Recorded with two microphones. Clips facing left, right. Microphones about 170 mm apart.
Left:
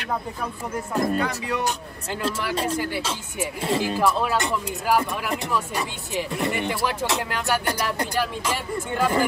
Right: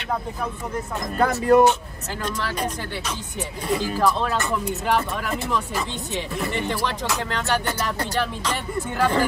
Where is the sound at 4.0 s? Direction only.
5° left (ahead or behind).